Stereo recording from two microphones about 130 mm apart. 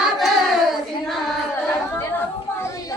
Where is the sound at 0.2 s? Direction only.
Centre (ahead or behind).